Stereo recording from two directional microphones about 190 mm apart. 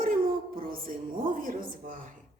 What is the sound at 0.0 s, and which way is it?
Music, 50° right (ahead or behind).